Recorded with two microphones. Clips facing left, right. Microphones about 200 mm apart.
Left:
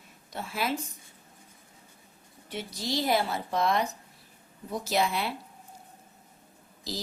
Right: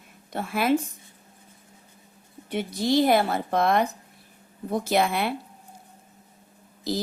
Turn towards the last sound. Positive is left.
turn(degrees=-55)  # may be behind; listen again after turning